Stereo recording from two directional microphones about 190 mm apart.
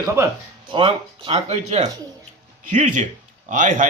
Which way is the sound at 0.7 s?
25° right (ahead or behind).